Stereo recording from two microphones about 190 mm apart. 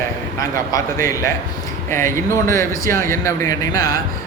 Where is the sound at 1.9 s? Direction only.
10° left (ahead or behind).